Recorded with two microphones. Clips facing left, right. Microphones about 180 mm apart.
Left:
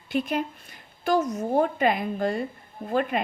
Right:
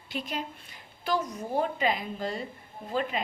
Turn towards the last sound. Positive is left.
turn(degrees=55)  # may be behind; listen again after turning